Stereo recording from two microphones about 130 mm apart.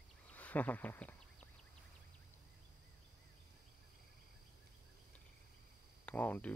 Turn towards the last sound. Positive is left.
turn(degrees=10)  # may be behind; listen again after turning